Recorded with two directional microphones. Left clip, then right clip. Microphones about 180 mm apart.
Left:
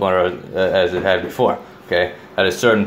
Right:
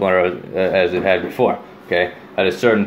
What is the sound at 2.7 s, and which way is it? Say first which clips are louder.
Speech: left 1 dB; 5° left (ahead or behind).